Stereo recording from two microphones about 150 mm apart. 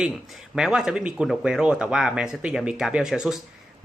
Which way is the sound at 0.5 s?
5° right (ahead or behind).